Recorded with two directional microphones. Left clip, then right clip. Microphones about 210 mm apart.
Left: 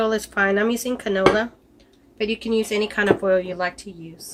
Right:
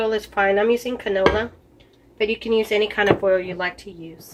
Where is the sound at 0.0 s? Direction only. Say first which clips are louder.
Even; 30° left (ahead or behind).